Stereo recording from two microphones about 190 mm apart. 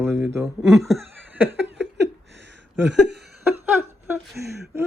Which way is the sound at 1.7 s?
65° right (ahead or behind).